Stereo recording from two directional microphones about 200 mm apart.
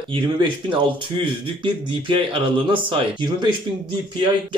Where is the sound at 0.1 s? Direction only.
25° right (ahead or behind).